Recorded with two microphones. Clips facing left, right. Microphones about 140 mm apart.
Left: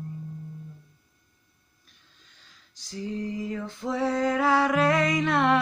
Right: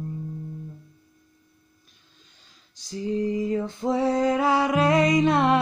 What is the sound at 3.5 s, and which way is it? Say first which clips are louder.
Music: right 6 dB; 25° right (ahead or behind).